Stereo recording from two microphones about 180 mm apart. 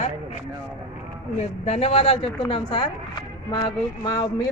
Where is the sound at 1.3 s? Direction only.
35° left (ahead or behind).